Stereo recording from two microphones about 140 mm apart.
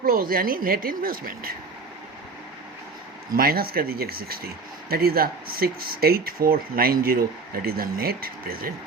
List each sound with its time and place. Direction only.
0.0 s speech: 90° right
3.3 s speech: 90° right